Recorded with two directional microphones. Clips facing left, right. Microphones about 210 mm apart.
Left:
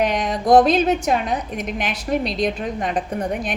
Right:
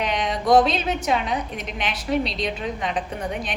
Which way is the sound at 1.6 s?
50° left (ahead or behind).